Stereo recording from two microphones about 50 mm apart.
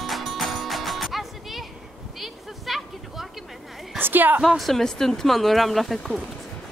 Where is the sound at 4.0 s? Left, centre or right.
Right.